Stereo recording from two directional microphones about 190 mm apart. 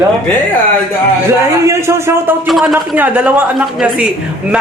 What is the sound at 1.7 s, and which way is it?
Speech, 15° right (ahead or behind).